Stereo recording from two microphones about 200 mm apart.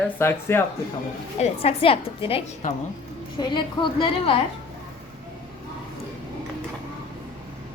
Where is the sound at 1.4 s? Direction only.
30° left (ahead or behind).